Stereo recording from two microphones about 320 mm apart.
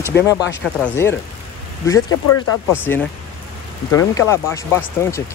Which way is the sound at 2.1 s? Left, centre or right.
Left.